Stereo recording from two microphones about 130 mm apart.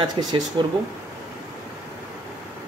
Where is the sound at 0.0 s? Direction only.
35° right (ahead or behind).